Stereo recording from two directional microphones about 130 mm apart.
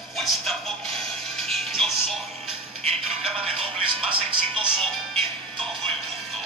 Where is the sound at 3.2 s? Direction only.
50° right (ahead or behind).